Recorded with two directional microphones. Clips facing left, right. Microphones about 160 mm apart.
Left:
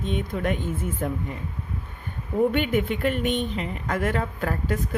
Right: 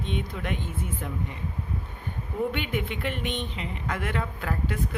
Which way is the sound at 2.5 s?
45° left (ahead or behind).